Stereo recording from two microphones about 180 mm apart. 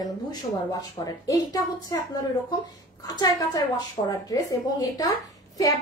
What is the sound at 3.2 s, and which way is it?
Speech, 20° left (ahead or behind).